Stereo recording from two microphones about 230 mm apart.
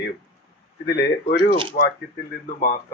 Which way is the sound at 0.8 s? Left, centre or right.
Left.